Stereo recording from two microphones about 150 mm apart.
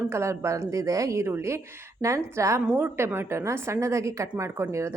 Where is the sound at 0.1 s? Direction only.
20° right (ahead or behind).